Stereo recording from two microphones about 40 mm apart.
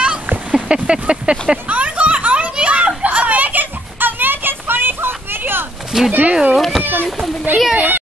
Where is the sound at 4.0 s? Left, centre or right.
Right.